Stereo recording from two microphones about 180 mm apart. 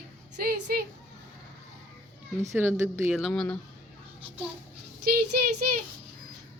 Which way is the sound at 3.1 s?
Centre (ahead or behind).